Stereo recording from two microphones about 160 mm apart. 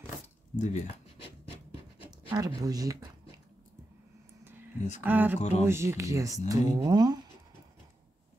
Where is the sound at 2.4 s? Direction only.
25° right (ahead or behind).